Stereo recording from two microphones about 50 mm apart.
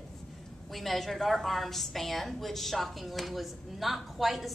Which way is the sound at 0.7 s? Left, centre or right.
Centre.